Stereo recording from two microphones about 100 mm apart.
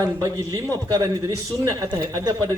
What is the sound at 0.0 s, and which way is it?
A man's voice, 40° right (ahead or behind).